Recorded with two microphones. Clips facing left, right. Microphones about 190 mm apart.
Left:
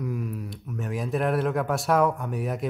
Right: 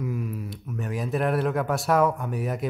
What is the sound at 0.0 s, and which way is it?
Speech, centre (ahead or behind).